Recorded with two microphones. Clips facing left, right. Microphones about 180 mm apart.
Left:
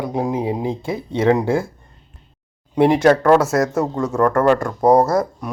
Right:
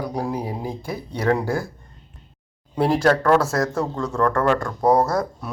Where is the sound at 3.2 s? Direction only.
20° left (ahead or behind).